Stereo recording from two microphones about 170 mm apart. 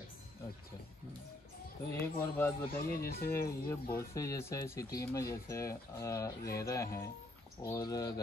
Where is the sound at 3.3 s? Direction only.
15° left (ahead or behind).